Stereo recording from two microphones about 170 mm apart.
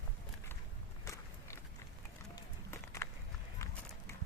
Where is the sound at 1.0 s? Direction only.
20° left (ahead or behind).